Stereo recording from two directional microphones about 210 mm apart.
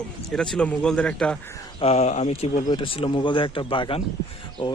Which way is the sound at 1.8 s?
30° left (ahead or behind).